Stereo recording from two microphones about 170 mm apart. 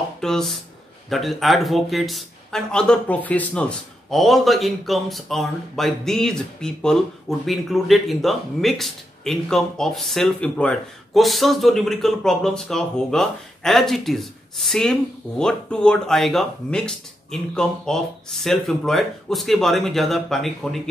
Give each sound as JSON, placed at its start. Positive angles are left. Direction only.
{"t": 0.2, "sound": "speech", "side_deg": 5}